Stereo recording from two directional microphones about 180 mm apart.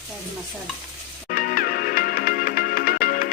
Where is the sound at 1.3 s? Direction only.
55° left (ahead or behind).